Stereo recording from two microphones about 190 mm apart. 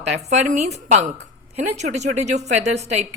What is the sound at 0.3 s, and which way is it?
A woman's voice, 35° right (ahead or behind).